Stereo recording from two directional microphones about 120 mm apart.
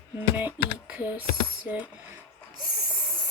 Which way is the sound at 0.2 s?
15° right (ahead or behind).